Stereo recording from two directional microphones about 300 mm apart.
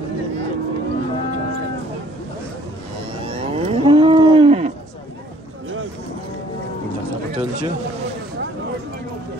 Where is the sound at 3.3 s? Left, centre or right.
Centre.